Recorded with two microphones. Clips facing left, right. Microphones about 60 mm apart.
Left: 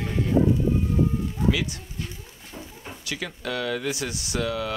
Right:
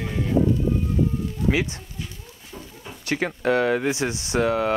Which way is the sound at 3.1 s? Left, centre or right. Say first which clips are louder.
Right 9 dB; right.